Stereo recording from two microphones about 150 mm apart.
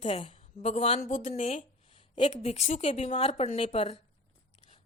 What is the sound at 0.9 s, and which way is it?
Speech, 65° left (ahead or behind).